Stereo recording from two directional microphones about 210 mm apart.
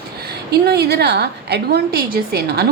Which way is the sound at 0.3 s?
50° right (ahead or behind).